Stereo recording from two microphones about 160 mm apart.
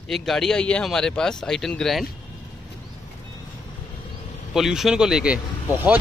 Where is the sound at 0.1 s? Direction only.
Centre (ahead or behind).